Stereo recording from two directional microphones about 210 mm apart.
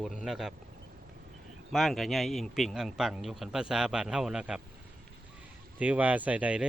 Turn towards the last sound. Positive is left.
turn(degrees=-5)  # may be behind; listen again after turning